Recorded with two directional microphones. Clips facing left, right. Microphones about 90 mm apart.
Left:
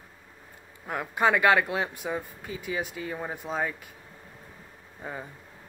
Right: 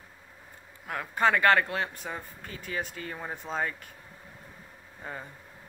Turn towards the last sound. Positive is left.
turn(degrees=10)  # may be behind; listen again after turning